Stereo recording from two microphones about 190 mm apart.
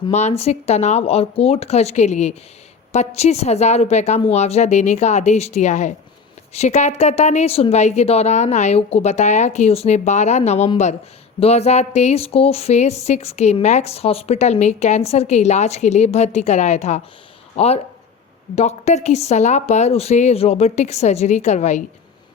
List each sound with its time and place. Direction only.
0.1 s speech: 35° left (ahead or behind)
18.5 s speech: 35° left (ahead or behind)